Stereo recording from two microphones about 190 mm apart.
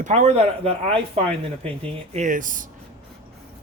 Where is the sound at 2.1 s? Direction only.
40° right (ahead or behind).